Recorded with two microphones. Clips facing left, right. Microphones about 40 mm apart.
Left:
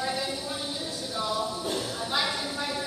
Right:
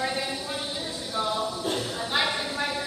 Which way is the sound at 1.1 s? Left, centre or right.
Right.